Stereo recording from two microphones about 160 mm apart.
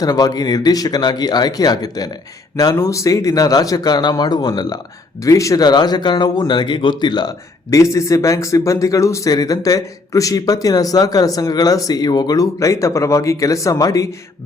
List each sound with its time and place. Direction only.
0.0 s speech: 25° left (ahead or behind)